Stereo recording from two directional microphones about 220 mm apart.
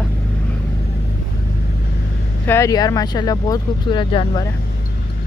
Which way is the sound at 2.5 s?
15° left (ahead or behind).